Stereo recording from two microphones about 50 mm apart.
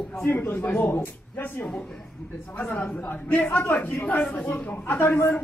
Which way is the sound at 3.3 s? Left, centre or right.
Left.